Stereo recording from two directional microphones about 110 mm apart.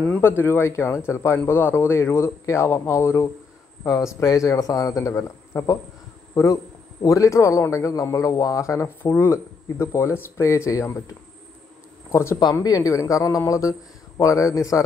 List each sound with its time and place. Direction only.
0.0 s a man's voice: 15° left (ahead or behind)
8.8 s a man's voice: 15° left (ahead or behind)
12.1 s a man's voice: 25° left (ahead or behind)